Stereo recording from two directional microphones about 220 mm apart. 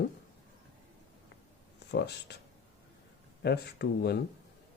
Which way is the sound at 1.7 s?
50° left (ahead or behind).